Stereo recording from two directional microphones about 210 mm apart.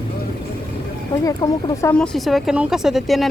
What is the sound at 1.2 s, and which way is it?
Speech, 20° left (ahead or behind).